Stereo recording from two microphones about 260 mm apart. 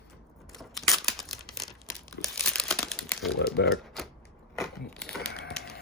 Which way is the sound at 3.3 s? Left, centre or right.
Left.